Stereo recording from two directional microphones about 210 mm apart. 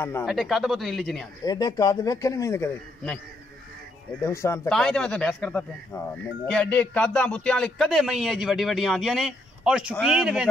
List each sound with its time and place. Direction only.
0.2 s speech: centre (ahead or behind)
1.4 s a man's voice: 20° left (ahead or behind)
4.2 s a man's voice: 15° left (ahead or behind); by 10.5 s 5° right (ahead or behind)